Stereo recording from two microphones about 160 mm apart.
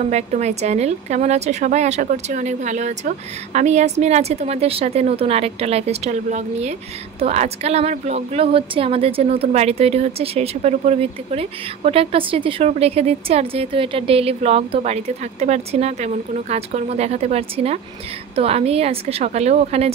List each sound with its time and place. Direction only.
0.0 s a woman's voice: 45° right (ahead or behind)